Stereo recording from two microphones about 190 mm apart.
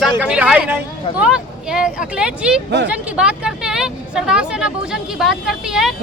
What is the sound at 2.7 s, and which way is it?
Speech, 65° right (ahead or behind).